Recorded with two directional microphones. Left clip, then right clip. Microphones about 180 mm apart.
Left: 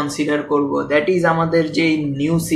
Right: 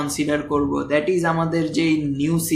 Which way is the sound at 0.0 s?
50° right (ahead or behind).